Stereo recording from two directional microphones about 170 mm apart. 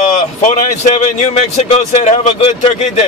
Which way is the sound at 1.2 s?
40° left (ahead or behind).